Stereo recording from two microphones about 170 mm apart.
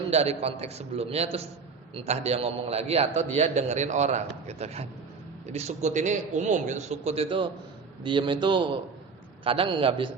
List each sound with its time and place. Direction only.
0.1 s a man's voice: 40° right (ahead or behind)